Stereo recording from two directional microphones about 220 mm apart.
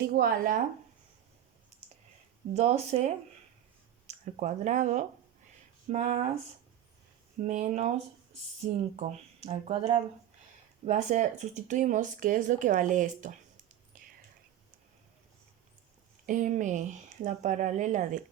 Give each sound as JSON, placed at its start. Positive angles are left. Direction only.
{"t": 0.1, "sound": "speech", "side_deg": -45}
{"t": 2.5, "sound": "speech", "side_deg": -30}
{"t": 7.4, "sound": "speech", "side_deg": -35}
{"t": 13.9, "sound": "whispering", "side_deg": -40}
{"t": 16.2, "sound": "speech", "side_deg": -35}